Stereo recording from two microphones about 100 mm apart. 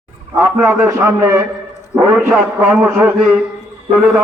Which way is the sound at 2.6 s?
20° right (ahead or behind).